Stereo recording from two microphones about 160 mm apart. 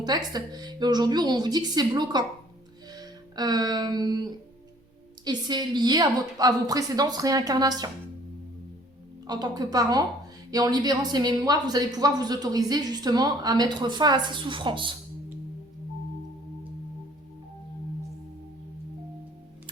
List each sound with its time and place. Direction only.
0.0 s speech: 25° right (ahead or behind)
2.9 s music: 25° right (ahead or behind)
5.2 s speech: 25° right (ahead or behind)
9.2 s speech: 25° right (ahead or behind)